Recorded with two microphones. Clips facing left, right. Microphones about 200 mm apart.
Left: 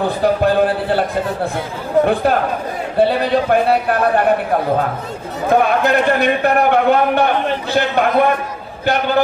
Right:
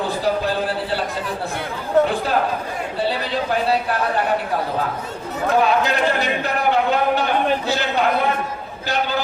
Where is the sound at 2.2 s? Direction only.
55° left (ahead or behind).